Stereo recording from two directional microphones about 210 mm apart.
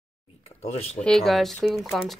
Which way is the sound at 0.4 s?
30° left (ahead or behind).